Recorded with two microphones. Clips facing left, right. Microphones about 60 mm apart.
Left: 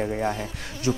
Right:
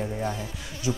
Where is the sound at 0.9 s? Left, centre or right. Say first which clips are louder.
Left 3 dB; left.